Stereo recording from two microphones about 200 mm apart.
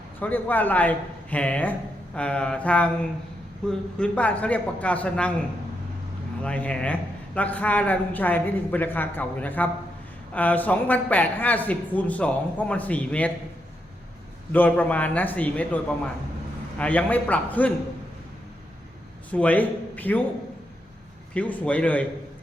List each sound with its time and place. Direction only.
0.2 s a man's voice: 10° left (ahead or behind)
2.1 s a sound: 5° left (ahead or behind)
3.7 s a man's voice: 5° left (ahead or behind)
6.4 s a man's voice: 5° left (ahead or behind)
14.5 s a man's voice: 10° left (ahead or behind)
19.3 s a man's voice: 5° left (ahead or behind)
21.3 s a man's voice: 5° left (ahead or behind)